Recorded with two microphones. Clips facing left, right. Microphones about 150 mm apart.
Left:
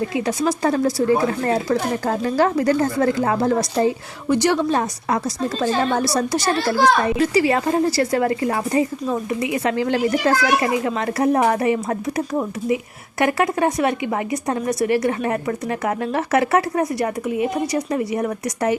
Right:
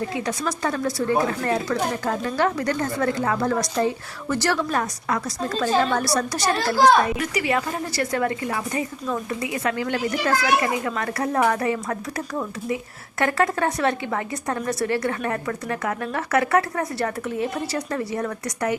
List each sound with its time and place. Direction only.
0.2 s speech: 30° left (ahead or behind)
4.3 s a woman's voice: 15° left (ahead or behind)